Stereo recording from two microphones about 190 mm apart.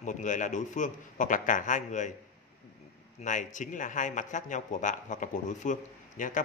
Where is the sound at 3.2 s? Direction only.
40° left (ahead or behind).